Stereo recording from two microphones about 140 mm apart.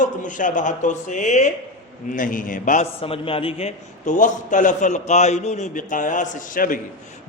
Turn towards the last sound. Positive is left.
turn(degrees=75)  # may be behind; listen again after turning